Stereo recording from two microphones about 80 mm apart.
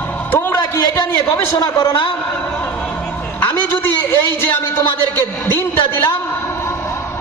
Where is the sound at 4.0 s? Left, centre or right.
Left.